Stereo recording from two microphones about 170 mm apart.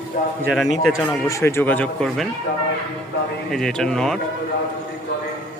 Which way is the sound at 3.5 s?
5° left (ahead or behind).